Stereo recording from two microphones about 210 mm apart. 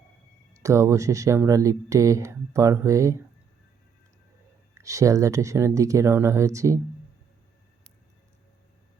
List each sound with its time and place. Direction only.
0.5 s speech: 15° right (ahead or behind)
4.7 s speech: 15° right (ahead or behind)